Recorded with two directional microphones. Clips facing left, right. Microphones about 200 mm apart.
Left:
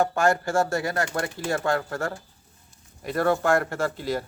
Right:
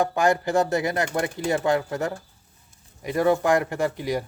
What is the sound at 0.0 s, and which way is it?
Speech, 15° right (ahead or behind).